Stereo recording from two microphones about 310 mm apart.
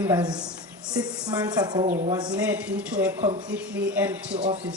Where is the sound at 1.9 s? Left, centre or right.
Right.